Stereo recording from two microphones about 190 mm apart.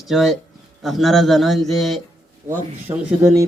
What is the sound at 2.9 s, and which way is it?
Speech, 25° right (ahead or behind).